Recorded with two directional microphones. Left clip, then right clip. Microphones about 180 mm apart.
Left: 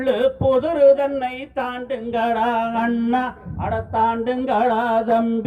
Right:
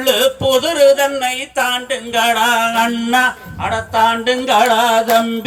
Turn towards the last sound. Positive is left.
turn(degrees=50)  # may be behind; listen again after turning